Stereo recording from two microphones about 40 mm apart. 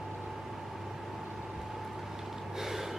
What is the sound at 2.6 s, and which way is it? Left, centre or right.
Gasp, centre.